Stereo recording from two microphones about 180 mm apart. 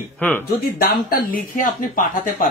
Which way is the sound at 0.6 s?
55° left (ahead or behind).